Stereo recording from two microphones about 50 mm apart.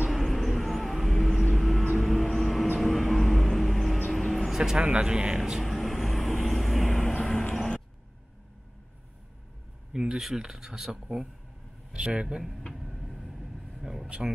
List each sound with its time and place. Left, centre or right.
0.1 s vehicle: centre
2.8 s music: centre
4.1 s vehicle: centre
4.5 s vehicle: centre
4.7 s speech: centre
5.4 s vehicle: centre
7.5 s vehicle: centre
9.9 s speech: centre
12.7 s vehicle: centre
14.0 s speech: centre